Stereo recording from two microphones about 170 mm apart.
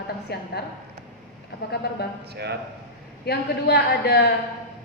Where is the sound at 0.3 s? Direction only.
70° left (ahead or behind).